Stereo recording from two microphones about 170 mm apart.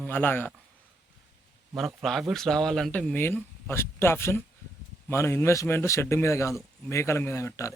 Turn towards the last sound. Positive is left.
turn(degrees=15)  # may be behind; listen again after turning